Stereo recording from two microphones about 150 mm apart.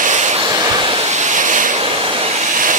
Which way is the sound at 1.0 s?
50° right (ahead or behind).